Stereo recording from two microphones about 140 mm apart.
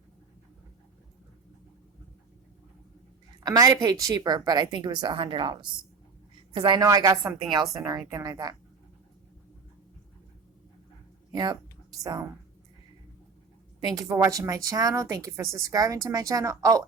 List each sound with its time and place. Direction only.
3.4 s a woman's voice: 25° right (ahead or behind)
11.3 s speech: 30° right (ahead or behind)
13.8 s speech: 25° right (ahead or behind)